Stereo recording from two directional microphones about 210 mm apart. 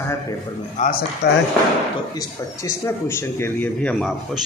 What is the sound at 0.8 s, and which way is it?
Speech, 45° left (ahead or behind).